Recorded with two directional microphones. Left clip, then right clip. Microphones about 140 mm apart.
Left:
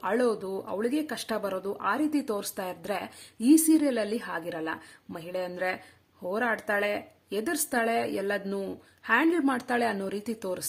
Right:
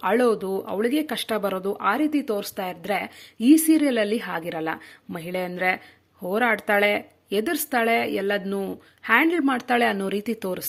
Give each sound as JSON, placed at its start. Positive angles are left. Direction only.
{"t": 0.0, "sound": "speech", "side_deg": -25}